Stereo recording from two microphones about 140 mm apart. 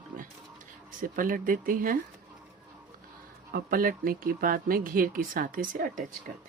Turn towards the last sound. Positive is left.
turn(degrees=-75)  # may be behind; listen again after turning